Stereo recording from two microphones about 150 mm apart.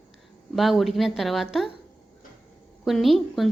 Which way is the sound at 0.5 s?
Centre (ahead or behind).